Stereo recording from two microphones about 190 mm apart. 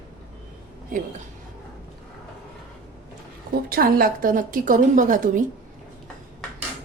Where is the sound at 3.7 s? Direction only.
50° right (ahead or behind).